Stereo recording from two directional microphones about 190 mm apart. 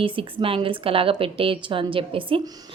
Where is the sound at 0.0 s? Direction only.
30° right (ahead or behind).